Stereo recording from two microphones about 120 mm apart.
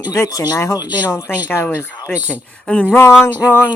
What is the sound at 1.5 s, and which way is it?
Speech, 20° left (ahead or behind).